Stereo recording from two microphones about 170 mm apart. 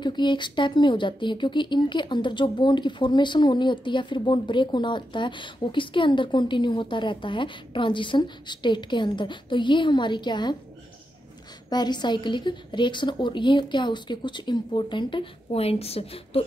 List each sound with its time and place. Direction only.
0.0 s speech: 25° left (ahead or behind)
11.7 s speech: 25° left (ahead or behind)